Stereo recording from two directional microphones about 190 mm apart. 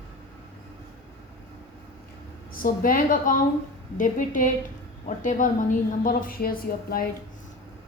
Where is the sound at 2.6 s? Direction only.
45° left (ahead or behind).